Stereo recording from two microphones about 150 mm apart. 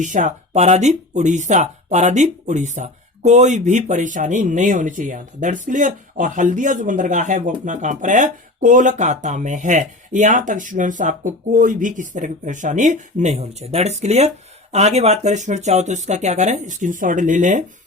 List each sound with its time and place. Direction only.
0.0 s speech: 55° right (ahead or behind)